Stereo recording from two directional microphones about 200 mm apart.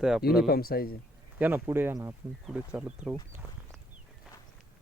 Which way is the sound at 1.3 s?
10° right (ahead or behind).